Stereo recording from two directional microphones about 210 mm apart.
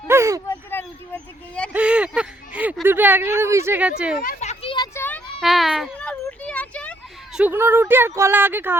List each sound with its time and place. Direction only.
0.1 s speech: 15° right (ahead or behind)
0.4 s speech: 10° left (ahead or behind)
1.7 s speech: 5° right (ahead or behind)
4.2 s children playing: 35° left (ahead or behind)
4.9 s a sound: 10° left (ahead or behind)
7.3 s speech: 10° right (ahead or behind)